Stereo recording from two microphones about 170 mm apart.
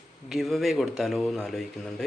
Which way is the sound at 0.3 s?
Centre (ahead or behind).